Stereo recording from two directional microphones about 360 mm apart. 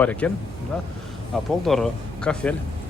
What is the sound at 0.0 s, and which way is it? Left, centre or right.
Speech, centre.